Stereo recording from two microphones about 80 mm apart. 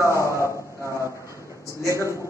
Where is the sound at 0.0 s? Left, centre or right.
Left.